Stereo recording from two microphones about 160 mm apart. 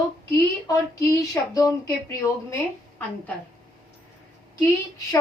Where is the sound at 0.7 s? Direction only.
20° left (ahead or behind).